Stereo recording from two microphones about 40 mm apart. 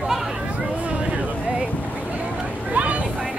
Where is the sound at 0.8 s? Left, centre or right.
Right.